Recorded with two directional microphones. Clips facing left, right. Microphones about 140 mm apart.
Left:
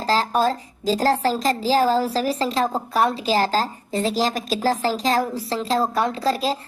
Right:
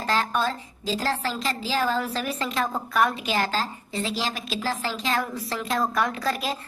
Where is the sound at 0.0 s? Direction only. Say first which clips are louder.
Left 5 dB; 35° left (ahead or behind).